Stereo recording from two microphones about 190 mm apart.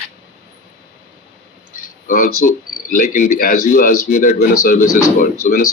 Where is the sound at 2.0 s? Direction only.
45° left (ahead or behind).